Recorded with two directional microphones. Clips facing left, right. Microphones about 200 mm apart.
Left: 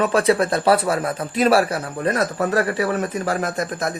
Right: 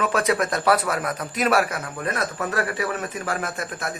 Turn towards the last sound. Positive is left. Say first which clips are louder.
# left 6 dB
turn(degrees=40)  # may be behind; listen again after turning